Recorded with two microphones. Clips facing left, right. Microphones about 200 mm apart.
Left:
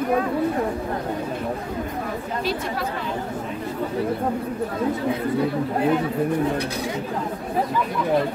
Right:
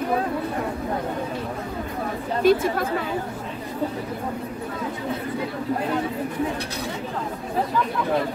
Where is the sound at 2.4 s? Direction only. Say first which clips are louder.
Right 10 dB; 50° right (ahead or behind).